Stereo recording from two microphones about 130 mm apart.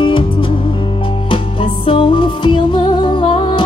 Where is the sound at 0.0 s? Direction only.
40° left (ahead or behind).